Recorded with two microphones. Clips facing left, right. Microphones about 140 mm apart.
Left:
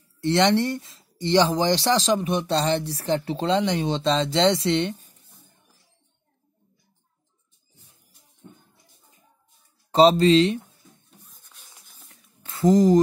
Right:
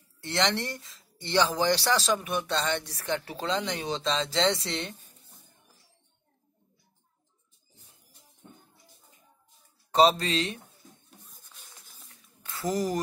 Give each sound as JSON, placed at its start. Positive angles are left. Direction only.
{"t": 0.2, "sound": "speech", "side_deg": 25}
{"t": 9.8, "sound": "speech", "side_deg": 30}
{"t": 12.1, "sound": "a sound", "side_deg": 25}